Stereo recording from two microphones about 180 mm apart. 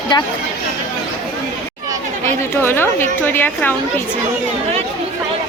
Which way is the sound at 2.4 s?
10° left (ahead or behind).